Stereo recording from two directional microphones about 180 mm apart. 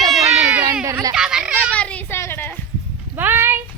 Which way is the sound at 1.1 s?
5° right (ahead or behind).